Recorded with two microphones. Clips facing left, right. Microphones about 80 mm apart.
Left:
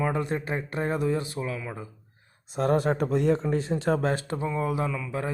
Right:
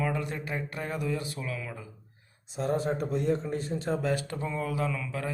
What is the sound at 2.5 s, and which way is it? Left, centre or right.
Speech, left.